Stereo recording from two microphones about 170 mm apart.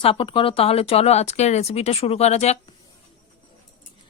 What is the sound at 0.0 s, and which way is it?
A woman's voice, 30° left (ahead or behind).